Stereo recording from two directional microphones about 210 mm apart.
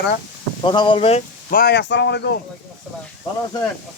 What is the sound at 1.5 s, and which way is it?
Speech, 50° left (ahead or behind).